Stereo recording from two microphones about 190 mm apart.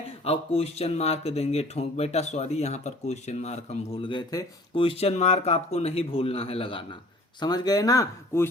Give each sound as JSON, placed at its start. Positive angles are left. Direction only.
{"t": 0.3, "sound": "speech", "side_deg": 30}